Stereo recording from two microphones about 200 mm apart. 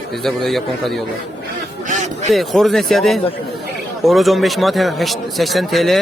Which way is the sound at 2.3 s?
Centre (ahead or behind).